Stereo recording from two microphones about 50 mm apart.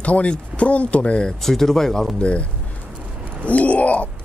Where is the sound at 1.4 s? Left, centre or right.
Centre.